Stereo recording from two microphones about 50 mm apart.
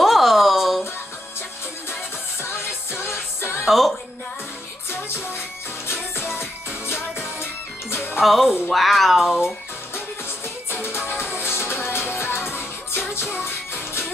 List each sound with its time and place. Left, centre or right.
0.0 s a sound: centre
2.4 s music: left
3.6 s speech: centre
6.1 s music: left
7.9 s music: left
8.2 s speech: centre
10.7 s music: left